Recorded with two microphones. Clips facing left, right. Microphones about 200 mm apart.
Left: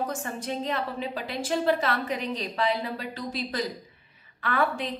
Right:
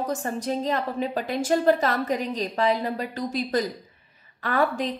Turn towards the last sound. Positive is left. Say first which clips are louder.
# right 3 dB
turn(degrees=-40)  # may be behind; listen again after turning